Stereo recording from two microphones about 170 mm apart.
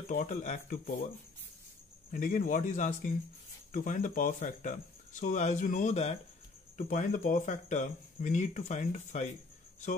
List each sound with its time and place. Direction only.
0.1 s speech: 50° left (ahead or behind)
2.1 s speech: 50° left (ahead or behind)